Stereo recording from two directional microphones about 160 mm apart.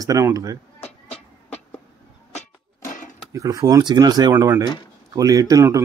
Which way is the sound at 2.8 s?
50° left (ahead or behind).